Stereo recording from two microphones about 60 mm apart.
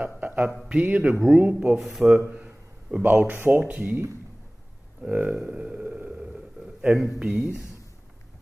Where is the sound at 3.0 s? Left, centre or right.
Right.